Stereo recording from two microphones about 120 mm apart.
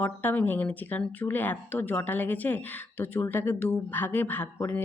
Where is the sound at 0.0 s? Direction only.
15° left (ahead or behind).